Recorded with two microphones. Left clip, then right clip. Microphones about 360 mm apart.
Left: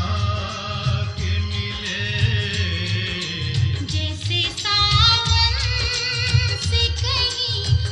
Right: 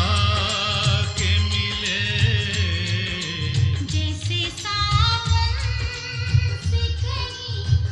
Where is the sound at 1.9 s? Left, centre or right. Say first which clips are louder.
Left 1 dB; centre.